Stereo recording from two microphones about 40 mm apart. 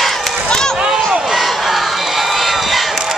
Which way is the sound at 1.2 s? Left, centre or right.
Centre.